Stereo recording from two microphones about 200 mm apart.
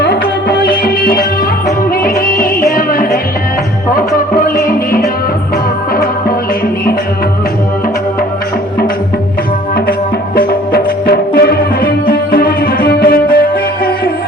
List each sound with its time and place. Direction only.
0.0 s music: 55° left (ahead or behind)
10.3 s music: 50° left (ahead or behind)